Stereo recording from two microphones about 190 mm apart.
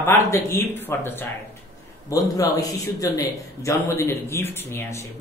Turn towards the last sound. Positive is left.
turn(degrees=15)  # may be behind; listen again after turning